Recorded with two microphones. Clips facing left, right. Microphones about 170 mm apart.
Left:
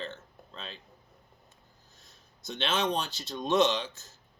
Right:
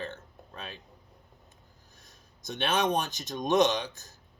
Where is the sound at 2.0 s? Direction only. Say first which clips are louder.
Right 1 dB; 15° right (ahead or behind).